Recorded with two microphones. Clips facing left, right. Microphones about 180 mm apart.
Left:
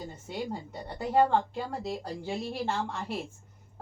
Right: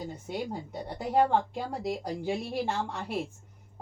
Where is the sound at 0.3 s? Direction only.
10° right (ahead or behind).